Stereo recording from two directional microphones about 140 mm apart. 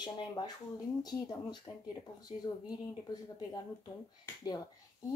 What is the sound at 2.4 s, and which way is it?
Speech, 30° left (ahead or behind).